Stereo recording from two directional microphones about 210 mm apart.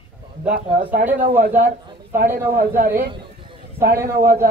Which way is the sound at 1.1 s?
40° right (ahead or behind).